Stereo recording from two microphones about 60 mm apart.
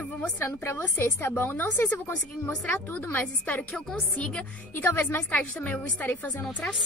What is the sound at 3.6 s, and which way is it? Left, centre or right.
Speech, centre.